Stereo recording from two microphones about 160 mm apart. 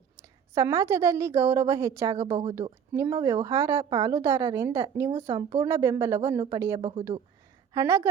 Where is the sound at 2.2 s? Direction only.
40° right (ahead or behind).